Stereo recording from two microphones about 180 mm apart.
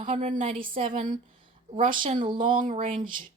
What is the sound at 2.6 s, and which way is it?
Speech, 45° right (ahead or behind).